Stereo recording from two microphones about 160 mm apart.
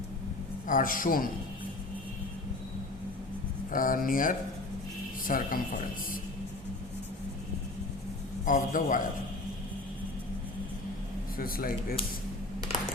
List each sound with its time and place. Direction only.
0.7 s speech: 60° left (ahead or behind)
3.7 s speech: 60° left (ahead or behind)
8.4 s speech: 55° left (ahead or behind)
11.3 s speech: 65° left (ahead or behind)